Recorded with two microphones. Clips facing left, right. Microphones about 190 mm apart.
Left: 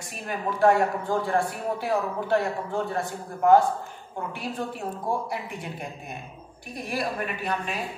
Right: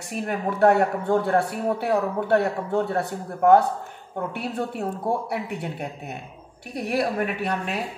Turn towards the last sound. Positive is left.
turn(degrees=-65)  # may be behind; listen again after turning